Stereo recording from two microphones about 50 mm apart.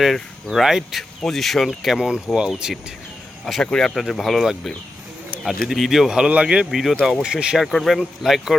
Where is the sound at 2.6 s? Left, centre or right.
Centre.